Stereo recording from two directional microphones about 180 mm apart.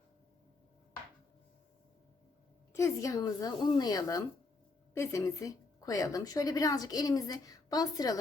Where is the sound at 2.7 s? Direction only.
15° left (ahead or behind).